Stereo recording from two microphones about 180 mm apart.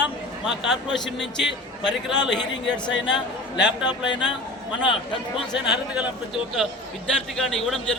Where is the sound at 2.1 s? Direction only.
25° left (ahead or behind).